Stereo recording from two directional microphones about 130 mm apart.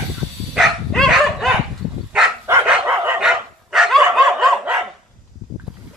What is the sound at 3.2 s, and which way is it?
Dog, 5° right (ahead or behind).